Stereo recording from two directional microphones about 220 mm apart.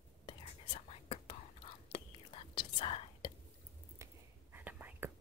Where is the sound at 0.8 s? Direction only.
25° left (ahead or behind).